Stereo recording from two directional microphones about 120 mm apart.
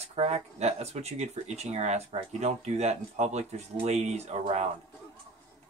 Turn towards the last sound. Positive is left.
turn(degrees=-65)  # may be behind; listen again after turning